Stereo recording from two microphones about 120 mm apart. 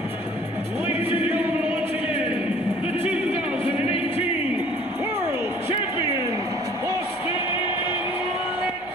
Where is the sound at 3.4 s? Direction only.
10° right (ahead or behind).